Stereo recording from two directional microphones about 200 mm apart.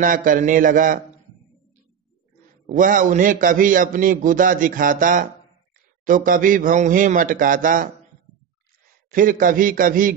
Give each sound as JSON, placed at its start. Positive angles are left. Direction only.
{"t": 0.0, "sound": "a man's voice", "side_deg": -40}
{"t": 2.6, "sound": "a man's voice", "side_deg": -40}
{"t": 9.1, "sound": "a man's voice", "side_deg": -45}